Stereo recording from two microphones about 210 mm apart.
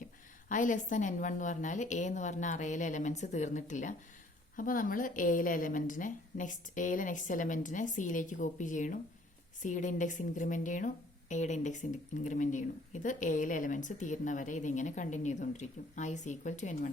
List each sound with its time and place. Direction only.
0.4 s a woman's voice: 40° left (ahead or behind)